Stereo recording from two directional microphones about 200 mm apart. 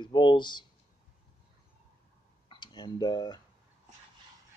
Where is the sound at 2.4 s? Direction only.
20° left (ahead or behind).